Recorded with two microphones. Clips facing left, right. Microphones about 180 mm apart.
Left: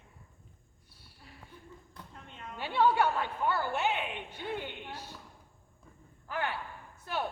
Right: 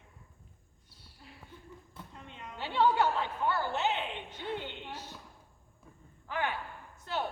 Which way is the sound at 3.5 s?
15° left (ahead or behind).